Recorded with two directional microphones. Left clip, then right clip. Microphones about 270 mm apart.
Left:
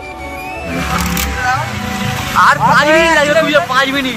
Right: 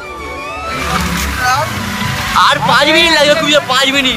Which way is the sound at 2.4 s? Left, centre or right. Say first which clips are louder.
Left 1 dB; right.